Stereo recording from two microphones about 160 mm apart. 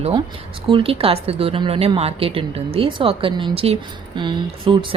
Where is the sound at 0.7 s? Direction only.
35° right (ahead or behind).